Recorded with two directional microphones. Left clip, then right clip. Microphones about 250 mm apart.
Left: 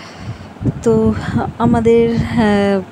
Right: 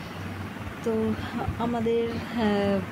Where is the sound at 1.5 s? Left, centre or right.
Left.